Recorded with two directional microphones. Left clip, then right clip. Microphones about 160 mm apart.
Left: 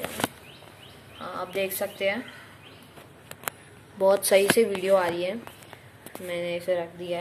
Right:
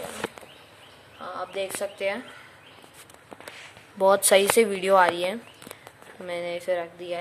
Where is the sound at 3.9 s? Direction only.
15° right (ahead or behind).